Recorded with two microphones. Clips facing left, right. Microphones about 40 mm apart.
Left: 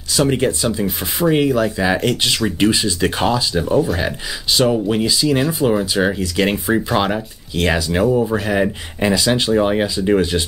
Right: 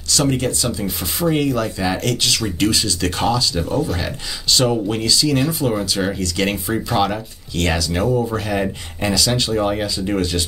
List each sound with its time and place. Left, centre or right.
0.1 s speech: left